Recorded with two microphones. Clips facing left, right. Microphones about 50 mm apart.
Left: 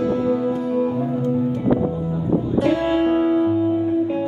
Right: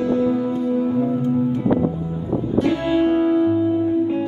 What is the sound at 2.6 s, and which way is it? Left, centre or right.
Music, centre.